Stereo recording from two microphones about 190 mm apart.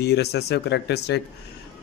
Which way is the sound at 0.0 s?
60° left (ahead or behind).